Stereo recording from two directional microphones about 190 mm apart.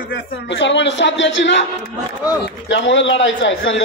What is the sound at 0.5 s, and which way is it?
A man's voice, 70° left (ahead or behind).